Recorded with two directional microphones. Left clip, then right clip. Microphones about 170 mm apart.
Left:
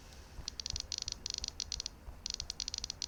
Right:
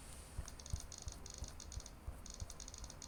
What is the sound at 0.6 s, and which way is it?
Rattle, 90° left.